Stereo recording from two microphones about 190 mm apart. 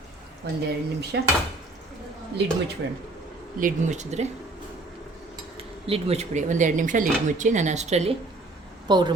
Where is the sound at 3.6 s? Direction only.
40° right (ahead or behind).